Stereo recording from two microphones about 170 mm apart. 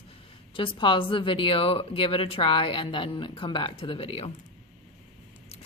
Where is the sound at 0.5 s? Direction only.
30° left (ahead or behind).